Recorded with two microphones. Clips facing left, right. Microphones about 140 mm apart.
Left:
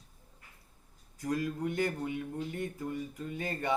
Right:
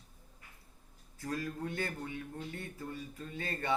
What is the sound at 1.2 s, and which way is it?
A man's voice, 15° left (ahead or behind).